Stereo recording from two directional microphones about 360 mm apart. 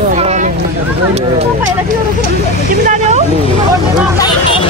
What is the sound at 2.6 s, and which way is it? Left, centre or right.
Speech, centre.